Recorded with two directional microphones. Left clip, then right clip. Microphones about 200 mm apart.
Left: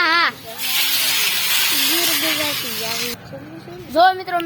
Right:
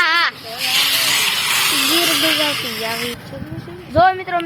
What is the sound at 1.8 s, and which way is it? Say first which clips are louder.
Speech: right 3 dB; 25° left (ahead or behind).